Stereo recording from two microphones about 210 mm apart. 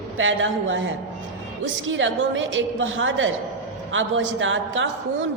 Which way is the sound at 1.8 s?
65° right (ahead or behind).